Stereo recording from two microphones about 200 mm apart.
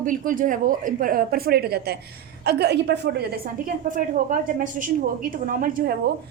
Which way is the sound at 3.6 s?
40° right (ahead or behind).